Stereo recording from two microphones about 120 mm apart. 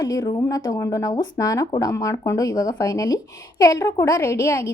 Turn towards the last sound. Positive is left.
turn(degrees=25)  # may be behind; listen again after turning